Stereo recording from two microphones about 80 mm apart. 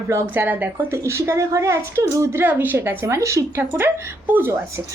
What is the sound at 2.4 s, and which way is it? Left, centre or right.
Speech, right.